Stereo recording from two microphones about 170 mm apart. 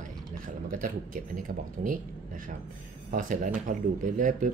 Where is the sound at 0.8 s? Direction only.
50° right (ahead or behind).